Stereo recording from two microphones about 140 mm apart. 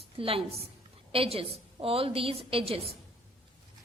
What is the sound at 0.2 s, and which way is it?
A woman's voice, 40° right (ahead or behind).